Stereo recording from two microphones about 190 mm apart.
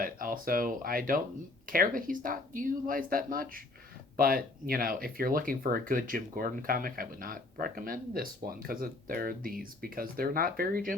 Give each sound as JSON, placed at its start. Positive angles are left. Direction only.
{"t": 0.0, "sound": "speech", "side_deg": -50}